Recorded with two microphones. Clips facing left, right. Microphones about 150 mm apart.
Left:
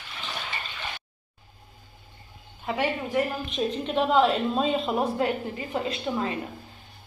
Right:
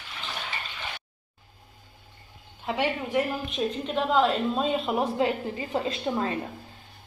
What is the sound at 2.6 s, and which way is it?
Speech, 15° right (ahead or behind).